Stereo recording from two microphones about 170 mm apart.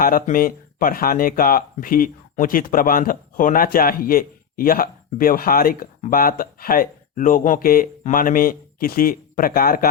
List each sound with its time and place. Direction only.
0.0 s speech: 55° left (ahead or behind)